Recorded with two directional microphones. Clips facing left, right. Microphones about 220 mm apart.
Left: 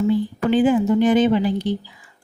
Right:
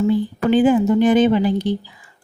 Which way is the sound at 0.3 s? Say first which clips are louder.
Right 3 dB; 50° right (ahead or behind).